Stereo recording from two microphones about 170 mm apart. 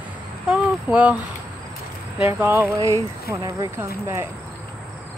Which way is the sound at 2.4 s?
15° right (ahead or behind).